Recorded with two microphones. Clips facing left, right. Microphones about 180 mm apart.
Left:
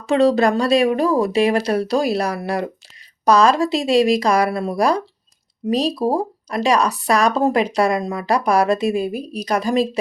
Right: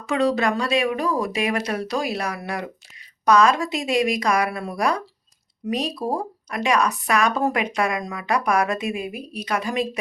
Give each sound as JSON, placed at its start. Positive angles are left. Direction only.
{"t": 0.0, "sound": "speech", "side_deg": 30}